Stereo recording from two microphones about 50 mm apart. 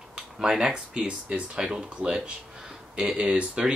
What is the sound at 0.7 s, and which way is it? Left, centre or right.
Speech, right.